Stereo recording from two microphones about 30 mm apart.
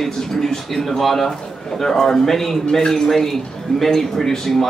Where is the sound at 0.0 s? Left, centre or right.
Centre.